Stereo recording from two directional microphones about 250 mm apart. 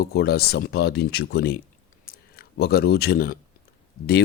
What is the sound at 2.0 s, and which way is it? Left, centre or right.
Clicking, left.